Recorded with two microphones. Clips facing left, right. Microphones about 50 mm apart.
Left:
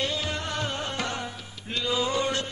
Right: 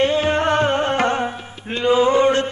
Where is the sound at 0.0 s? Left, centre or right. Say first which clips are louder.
Right 13 dB; right.